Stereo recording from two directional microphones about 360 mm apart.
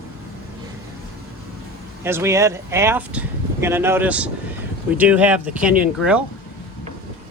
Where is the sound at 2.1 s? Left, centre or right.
Centre.